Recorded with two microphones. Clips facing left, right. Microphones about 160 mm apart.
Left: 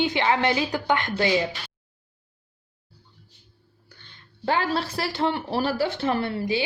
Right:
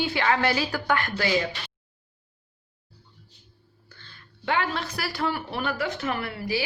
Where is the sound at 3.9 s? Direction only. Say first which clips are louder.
Right 1 dB; 15° left (ahead or behind).